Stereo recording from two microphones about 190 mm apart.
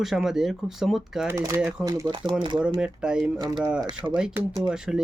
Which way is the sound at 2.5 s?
5° right (ahead or behind).